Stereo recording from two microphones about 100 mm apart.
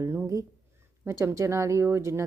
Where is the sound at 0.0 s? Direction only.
25° right (ahead or behind).